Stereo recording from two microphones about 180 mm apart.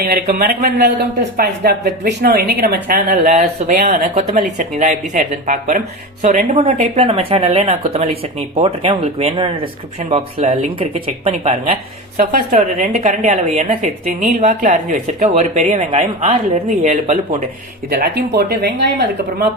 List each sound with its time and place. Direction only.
0.0 s a woman's voice: 60° right (ahead or behind); by 11.7 s 30° right (ahead or behind)
11.7 s a woman's voice: 50° right (ahead or behind)
17.8 s speech: 60° right (ahead or behind)